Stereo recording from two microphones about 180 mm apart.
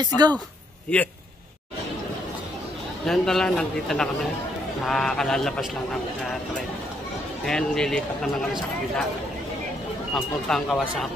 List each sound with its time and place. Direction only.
0.0 s speech: 25° right (ahead or behind)
0.9 s a man's voice: 5° left (ahead or behind)
3.1 s speech: centre (ahead or behind)
7.4 s speech: 5° left (ahead or behind)
10.1 s speech: centre (ahead or behind)